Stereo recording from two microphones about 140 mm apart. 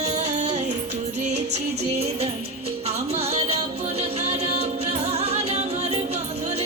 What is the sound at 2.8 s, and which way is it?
Music, 50° right (ahead or behind).